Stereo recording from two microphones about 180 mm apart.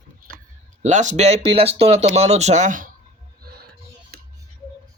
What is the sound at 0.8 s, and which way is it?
Speech, 40° right (ahead or behind).